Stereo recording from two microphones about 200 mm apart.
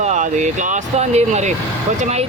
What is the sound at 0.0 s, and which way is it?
Speech, 35° right (ahead or behind).